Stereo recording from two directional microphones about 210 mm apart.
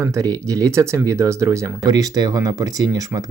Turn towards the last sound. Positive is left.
turn(degrees=-15)  # may be behind; listen again after turning